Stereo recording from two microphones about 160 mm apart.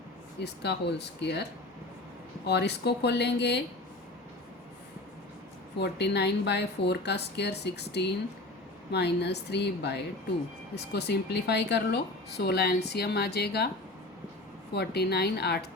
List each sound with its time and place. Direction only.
0.3 s a woman's voice: 90° left
2.5 s a woman's voice: 90° left
5.7 s a woman's voice: 90° left
14.7 s a woman's voice: 90° left